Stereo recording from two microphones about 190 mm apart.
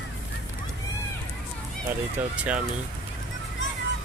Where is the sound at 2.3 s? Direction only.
5° right (ahead or behind).